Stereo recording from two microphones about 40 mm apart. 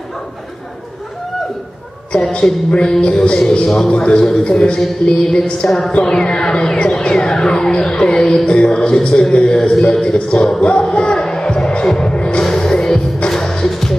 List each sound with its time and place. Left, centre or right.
2.9 s speech: centre
3.6 s a man's voice: centre
3.9 s speech: left
9.6 s a man's voice: centre
10.0 s speech: left
10.6 s music: left